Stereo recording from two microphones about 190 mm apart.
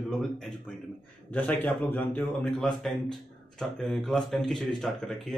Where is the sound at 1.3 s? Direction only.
10° left (ahead or behind).